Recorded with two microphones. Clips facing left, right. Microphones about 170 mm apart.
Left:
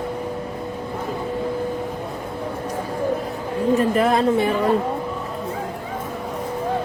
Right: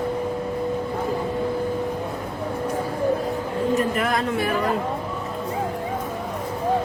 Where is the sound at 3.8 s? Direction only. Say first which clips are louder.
Left 5 dB; 30° left (ahead or behind).